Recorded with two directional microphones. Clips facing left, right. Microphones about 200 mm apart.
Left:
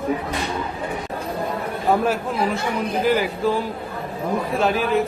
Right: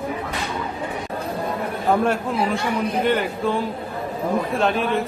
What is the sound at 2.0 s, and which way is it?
A man's voice, centre (ahead or behind).